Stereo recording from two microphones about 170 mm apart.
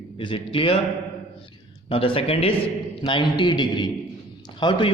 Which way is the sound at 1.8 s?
30° left (ahead or behind).